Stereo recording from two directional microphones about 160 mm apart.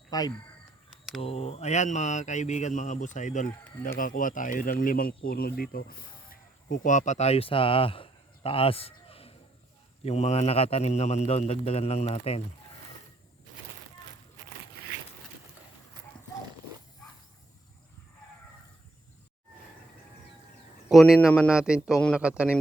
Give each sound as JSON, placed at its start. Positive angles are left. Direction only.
{"t": 0.1, "sound": "speech", "side_deg": 25}
{"t": 1.2, "sound": "a man's voice", "side_deg": 40}
{"t": 20.9, "sound": "speech", "side_deg": 0}